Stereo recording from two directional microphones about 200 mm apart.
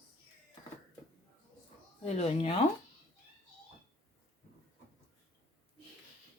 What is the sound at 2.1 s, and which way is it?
Speech, 30° left (ahead or behind).